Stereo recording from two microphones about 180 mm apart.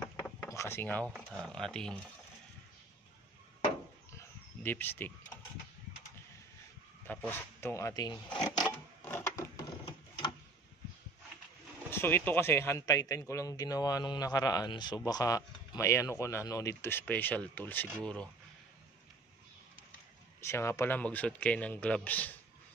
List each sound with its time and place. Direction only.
0.5 s speech: 15° left (ahead or behind)
4.2 s a sound: 10° left (ahead or behind)
7.1 s a man's voice: 10° left (ahead or behind)
9.0 s wood: 15° left (ahead or behind)
11.9 s a man's voice: 10° left (ahead or behind)
20.3 s a man's voice: 15° left (ahead or behind)